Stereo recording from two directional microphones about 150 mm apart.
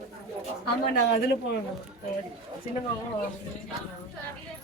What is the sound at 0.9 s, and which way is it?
Speech, 90° left.